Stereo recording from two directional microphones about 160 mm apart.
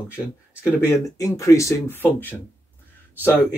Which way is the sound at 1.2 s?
20° left (ahead or behind).